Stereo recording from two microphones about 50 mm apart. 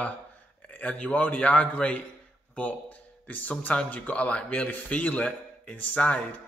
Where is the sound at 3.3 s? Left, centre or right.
Left.